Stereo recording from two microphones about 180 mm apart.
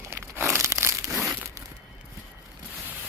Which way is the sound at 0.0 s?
15° right (ahead or behind).